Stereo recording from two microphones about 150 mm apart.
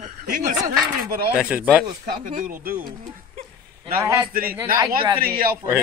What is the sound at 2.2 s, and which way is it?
Speech, 65° right (ahead or behind).